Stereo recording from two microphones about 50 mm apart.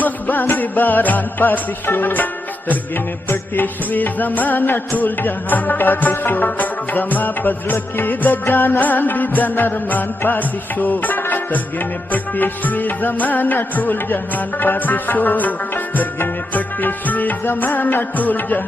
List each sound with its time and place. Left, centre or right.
0.0 s music: left
3.3 s music: left